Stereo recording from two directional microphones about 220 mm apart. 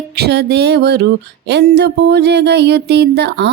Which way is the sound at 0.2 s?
50° right (ahead or behind).